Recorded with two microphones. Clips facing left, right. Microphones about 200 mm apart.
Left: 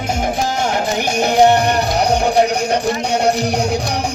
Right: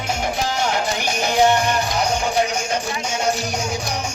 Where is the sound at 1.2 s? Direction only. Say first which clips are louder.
Left 5 dB; 60° left (ahead or behind).